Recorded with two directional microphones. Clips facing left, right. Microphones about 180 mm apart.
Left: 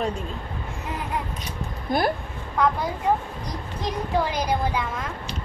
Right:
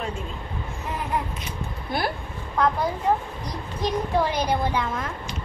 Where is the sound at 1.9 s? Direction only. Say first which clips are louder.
Left 4 dB; 45° left (ahead or behind).